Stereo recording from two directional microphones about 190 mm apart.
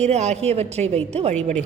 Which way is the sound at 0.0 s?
35° right (ahead or behind).